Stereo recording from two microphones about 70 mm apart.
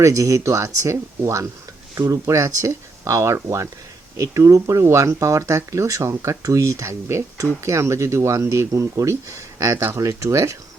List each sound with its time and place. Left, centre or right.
0.0 s speech: right